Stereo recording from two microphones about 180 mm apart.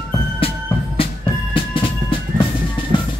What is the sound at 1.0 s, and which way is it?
Music, 30° left (ahead or behind).